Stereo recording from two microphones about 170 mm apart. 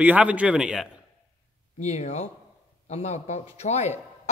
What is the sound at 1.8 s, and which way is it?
A man's voice, 40° left (ahead or behind).